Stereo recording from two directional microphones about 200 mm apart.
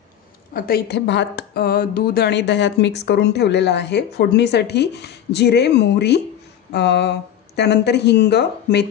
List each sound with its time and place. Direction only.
0.5 s a woman's voice: 50° left (ahead or behind)